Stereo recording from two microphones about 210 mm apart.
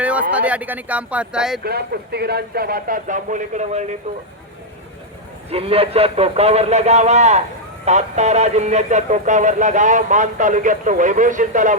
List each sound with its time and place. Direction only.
0.0 s speech: 5° right (ahead or behind)
1.6 s speech: 50° right (ahead or behind)
5.5 s a man's voice: 25° right (ahead or behind)